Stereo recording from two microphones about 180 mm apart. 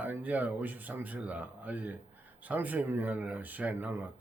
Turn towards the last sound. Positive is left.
turn(degrees=-10)  # may be behind; listen again after turning